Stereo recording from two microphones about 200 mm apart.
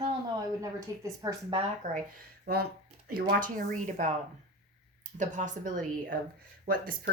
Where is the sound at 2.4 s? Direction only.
50° right (ahead or behind).